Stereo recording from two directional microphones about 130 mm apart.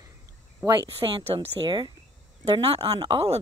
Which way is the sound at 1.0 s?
45° right (ahead or behind).